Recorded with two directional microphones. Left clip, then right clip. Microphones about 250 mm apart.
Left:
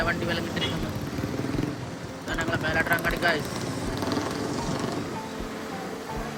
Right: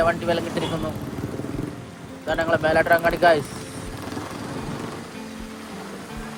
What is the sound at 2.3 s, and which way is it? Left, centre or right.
A man's voice, centre.